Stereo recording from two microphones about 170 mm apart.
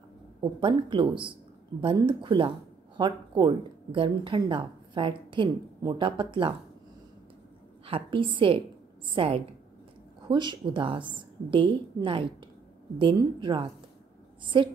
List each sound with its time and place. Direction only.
0.4 s speech: 30° right (ahead or behind)
7.8 s a woman's voice: 30° right (ahead or behind)